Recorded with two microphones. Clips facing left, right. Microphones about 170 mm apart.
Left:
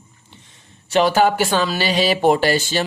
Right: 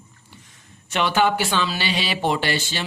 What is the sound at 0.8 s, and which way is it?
Speech, 40° left (ahead or behind).